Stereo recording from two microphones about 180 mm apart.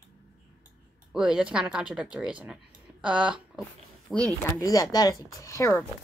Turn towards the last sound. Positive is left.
turn(degrees=15)  # may be behind; listen again after turning